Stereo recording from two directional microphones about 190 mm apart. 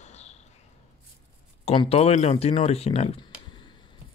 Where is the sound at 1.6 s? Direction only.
30° left (ahead or behind).